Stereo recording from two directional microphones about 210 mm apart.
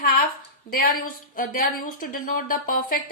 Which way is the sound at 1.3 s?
45° left (ahead or behind).